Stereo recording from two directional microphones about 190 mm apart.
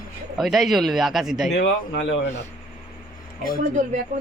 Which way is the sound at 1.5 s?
65° left (ahead or behind).